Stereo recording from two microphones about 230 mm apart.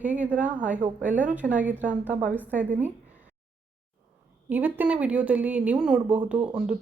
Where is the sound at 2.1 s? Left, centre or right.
Right.